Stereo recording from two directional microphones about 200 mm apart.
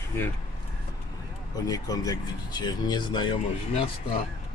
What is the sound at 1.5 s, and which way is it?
Speech, 15° left (ahead or behind).